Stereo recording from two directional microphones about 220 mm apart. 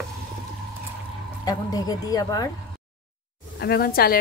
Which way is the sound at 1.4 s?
15° left (ahead or behind).